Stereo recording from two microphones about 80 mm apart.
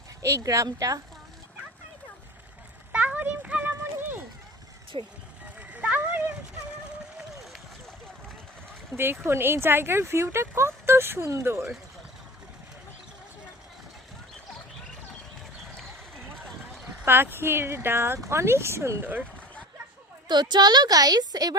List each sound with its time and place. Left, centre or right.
0.2 s speech: right
2.9 s a sound: centre
4.9 s speech: right
5.5 s a sound: centre
9.0 s speech: right
17.1 s speech: right
20.2 s a woman's voice: right